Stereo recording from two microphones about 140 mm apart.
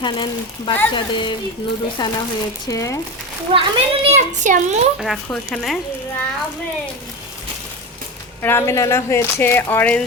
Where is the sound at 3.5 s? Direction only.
45° right (ahead or behind); by 4.7 s 60° right (ahead or behind).